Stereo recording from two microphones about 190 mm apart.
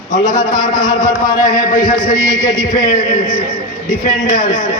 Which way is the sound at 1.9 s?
45° left (ahead or behind).